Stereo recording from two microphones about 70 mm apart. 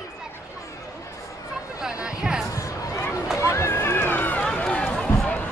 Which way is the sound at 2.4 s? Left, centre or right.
Left.